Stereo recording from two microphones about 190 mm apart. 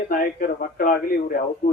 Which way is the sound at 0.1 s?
50° left (ahead or behind).